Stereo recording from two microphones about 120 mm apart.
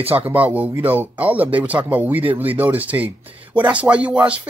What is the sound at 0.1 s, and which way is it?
Speech, 15° right (ahead or behind).